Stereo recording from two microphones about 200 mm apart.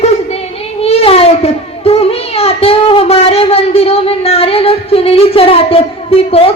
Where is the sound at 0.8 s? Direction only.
30° left (ahead or behind).